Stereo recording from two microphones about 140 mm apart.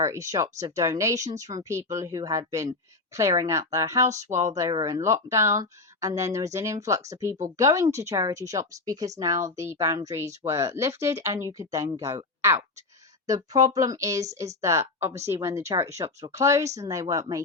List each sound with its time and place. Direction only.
0.0 s speech: 25° right (ahead or behind)
4.1 s speech: 60° right (ahead or behind)
4.5 s speech: 25° right (ahead or behind)
13.2 s speech: 25° right (ahead or behind)